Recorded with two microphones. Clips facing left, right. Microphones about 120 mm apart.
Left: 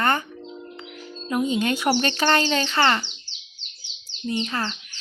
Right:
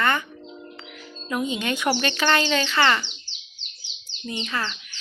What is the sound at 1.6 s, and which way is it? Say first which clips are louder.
Speech: left 2 dB; 40° left (ahead or behind).